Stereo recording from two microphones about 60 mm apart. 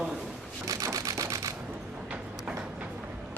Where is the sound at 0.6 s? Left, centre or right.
Right.